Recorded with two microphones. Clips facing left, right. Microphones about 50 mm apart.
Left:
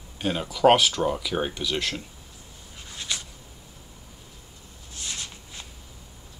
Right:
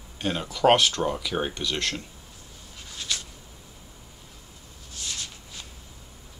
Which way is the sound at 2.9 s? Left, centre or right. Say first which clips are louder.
Even; centre.